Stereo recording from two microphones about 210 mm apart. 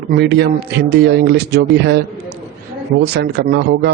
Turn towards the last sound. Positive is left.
turn(degrees=-55)  # may be behind; listen again after turning